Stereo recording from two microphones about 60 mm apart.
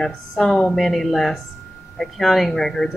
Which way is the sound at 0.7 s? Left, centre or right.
Centre.